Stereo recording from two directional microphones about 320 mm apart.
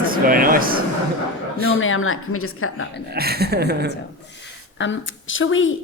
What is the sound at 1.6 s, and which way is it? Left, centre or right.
A woman's voice, left.